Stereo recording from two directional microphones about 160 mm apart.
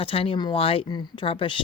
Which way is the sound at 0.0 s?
35° left (ahead or behind).